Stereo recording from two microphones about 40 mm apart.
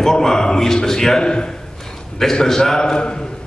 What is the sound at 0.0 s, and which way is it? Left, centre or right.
A man's voice, centre.